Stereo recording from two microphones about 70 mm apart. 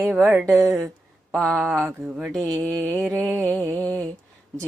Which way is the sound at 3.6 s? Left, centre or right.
Left.